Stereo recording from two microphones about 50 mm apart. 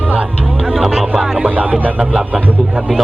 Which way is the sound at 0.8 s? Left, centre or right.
Centre.